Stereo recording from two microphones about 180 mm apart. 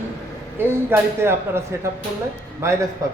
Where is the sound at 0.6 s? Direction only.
15° right (ahead or behind).